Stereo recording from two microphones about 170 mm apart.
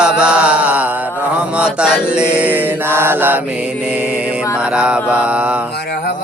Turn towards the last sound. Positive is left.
turn(degrees=70)  # may be behind; listen again after turning